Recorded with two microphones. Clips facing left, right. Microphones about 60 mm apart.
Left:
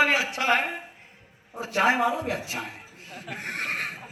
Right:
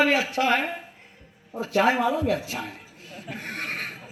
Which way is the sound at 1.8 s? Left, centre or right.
Left.